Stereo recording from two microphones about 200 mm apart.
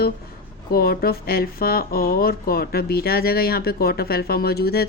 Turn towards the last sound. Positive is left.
turn(degrees=50)  # may be behind; listen again after turning